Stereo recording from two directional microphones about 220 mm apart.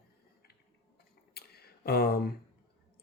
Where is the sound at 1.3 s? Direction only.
45° left (ahead or behind).